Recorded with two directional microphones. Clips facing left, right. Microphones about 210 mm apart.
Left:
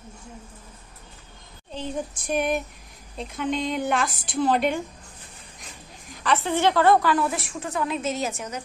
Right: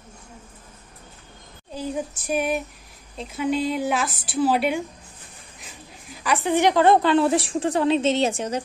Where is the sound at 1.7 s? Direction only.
10° right (ahead or behind).